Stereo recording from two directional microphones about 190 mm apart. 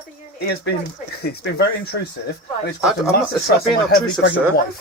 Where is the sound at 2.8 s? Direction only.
5° right (ahead or behind).